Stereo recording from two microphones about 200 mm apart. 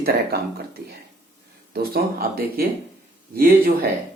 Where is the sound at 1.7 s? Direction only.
50° right (ahead or behind).